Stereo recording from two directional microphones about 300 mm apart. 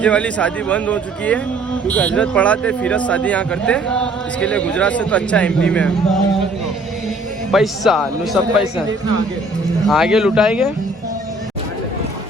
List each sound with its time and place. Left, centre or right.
0.0 s speech: centre
7.5 s speech: centre
9.8 s speech: centre